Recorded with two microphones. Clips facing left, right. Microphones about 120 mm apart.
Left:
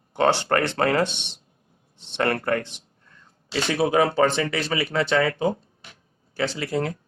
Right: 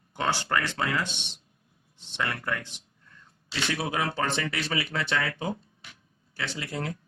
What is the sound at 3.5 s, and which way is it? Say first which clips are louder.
Speech: left 8 dB; 80° left.